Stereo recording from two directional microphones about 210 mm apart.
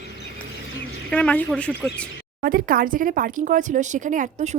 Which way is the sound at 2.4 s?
40° right (ahead or behind).